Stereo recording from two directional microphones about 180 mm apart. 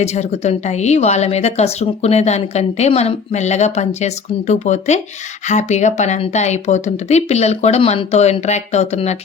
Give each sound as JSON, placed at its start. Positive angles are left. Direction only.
{"t": 0.0, "sound": "a woman's voice", "side_deg": 40}